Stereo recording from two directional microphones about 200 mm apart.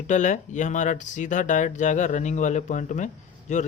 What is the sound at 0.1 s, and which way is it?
Speech, 40° left (ahead or behind).